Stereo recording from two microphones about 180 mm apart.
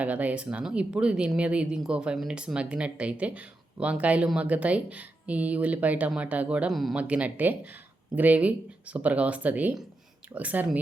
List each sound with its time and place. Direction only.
0.0 s speech: 10° right (ahead or behind)